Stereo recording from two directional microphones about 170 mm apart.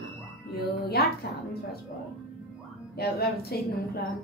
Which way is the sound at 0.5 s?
65° left (ahead or behind).